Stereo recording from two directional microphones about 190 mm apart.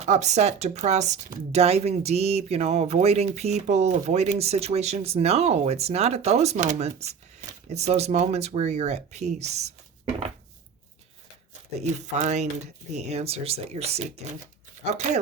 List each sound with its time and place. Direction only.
0.0 s speech: 40° right (ahead or behind)
11.8 s speech: 35° right (ahead or behind)